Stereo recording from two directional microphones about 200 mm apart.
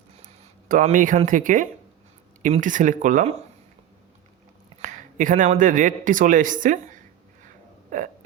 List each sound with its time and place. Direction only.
0.7 s speech: 40° right (ahead or behind)
4.8 s a man's voice: 40° right (ahead or behind)
7.9 s hiccup: 40° right (ahead or behind)